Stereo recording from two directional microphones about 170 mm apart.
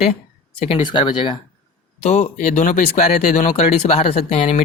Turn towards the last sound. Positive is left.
turn(degrees=40)  # may be behind; listen again after turning